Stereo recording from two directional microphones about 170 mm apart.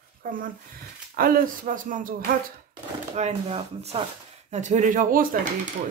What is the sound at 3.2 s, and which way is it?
Speech, 35° right (ahead or behind).